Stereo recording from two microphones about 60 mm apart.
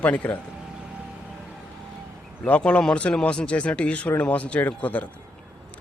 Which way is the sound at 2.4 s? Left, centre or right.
Centre.